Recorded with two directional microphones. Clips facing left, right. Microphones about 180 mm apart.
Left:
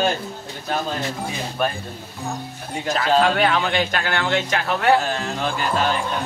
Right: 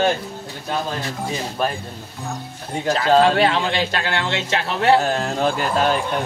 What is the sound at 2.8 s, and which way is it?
Speech, 30° right (ahead or behind).